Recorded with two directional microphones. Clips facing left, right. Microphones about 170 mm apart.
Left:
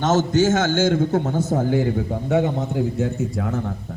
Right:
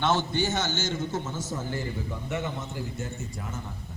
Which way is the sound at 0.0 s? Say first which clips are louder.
Left 8 dB; 45° left (ahead or behind).